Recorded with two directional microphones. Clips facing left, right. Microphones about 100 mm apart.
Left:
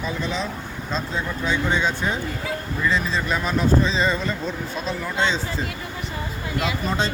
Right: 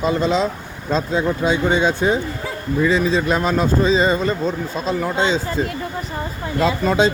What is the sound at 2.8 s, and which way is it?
Speech, 85° right.